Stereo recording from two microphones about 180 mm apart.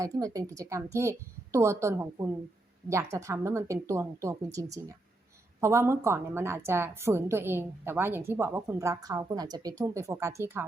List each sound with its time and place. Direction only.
0.0 s a woman's voice: 20° right (ahead or behind)
5.5 s a woman's voice: 15° right (ahead or behind)